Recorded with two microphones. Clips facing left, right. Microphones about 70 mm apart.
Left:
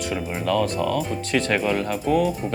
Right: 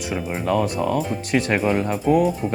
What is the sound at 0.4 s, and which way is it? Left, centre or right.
Speech, right.